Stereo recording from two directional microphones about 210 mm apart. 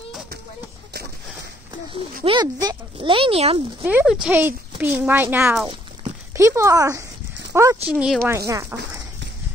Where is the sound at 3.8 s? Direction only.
5° right (ahead or behind).